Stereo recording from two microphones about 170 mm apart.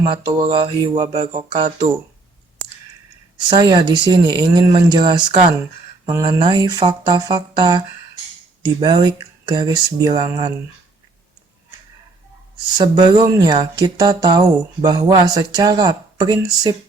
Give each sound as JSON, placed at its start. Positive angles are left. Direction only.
{"t": 0.0, "sound": "speech", "side_deg": -30}
{"t": 3.3, "sound": "speech", "side_deg": -25}
{"t": 8.8, "sound": "speech", "side_deg": -25}
{"t": 12.7, "sound": "speech", "side_deg": -25}